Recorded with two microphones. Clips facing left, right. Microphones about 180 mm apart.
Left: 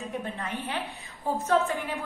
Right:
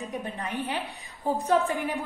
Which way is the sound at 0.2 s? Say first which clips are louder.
Right 2 dB; 15° right (ahead or behind).